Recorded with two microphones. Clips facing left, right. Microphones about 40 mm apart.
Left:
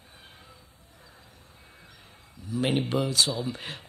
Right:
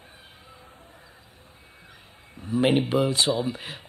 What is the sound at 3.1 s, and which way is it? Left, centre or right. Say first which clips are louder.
Speech: right 3 dB; right.